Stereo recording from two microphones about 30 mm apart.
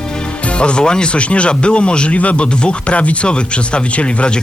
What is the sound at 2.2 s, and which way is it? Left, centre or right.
Speech, left.